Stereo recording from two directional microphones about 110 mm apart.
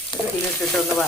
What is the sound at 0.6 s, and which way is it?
Speech, 5° left (ahead or behind).